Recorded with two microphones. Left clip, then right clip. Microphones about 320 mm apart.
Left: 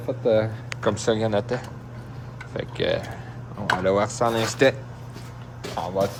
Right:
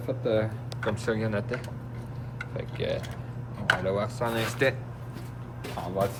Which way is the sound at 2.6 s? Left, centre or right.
Left.